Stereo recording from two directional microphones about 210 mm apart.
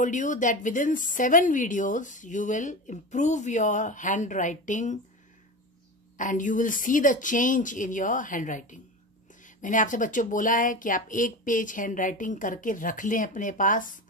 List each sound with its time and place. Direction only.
0.0 s a woman's voice: 35° left (ahead or behind)
6.1 s a woman's voice: 40° left (ahead or behind)